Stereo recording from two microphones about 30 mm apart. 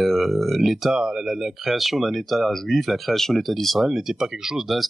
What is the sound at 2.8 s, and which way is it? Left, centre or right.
Speech, centre.